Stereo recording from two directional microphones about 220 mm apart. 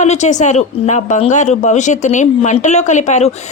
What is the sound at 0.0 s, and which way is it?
A woman's voice, 30° left (ahead or behind).